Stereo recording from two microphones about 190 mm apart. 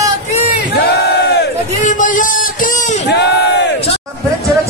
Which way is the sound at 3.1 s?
65° left (ahead or behind).